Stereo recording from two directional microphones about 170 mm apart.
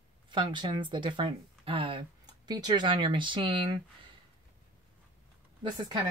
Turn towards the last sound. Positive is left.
turn(degrees=-25)  # may be behind; listen again after turning